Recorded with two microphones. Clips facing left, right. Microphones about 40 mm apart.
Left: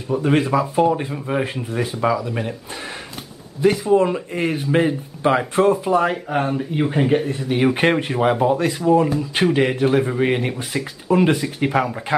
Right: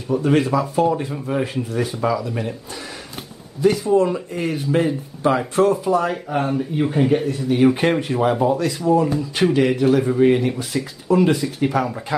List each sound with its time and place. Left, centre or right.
0.1 s speech: centre
3.6 s speech: left
11.1 s speech: left